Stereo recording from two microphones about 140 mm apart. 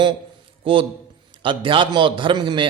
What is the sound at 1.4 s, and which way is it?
A man's voice, 35° right (ahead or behind).